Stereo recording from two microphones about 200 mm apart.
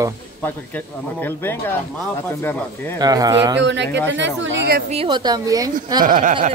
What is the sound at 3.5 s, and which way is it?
Speech, 60° right (ahead or behind).